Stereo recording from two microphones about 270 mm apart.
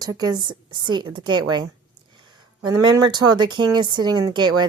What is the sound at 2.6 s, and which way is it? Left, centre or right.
Speech, centre.